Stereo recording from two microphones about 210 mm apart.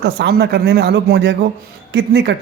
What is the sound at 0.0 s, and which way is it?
A man's voice, 50° right (ahead or behind).